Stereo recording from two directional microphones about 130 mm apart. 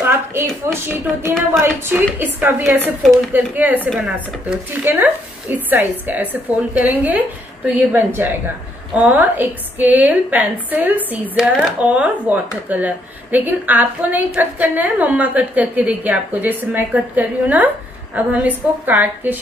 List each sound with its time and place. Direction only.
0.0 s a sound: 15° right (ahead or behind)
0.7 s a woman's voice: 20° right (ahead or behind)
3.9 s speech: 5° right (ahead or behind)
4.8 s a woman's voice: 15° right (ahead or behind)